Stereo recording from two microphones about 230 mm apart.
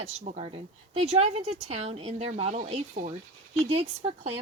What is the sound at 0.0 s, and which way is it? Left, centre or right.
Speech, right.